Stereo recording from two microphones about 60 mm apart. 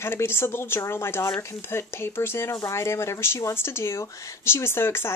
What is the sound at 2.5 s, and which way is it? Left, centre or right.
Speech, left.